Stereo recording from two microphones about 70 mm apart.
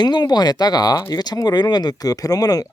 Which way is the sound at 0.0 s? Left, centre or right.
Left.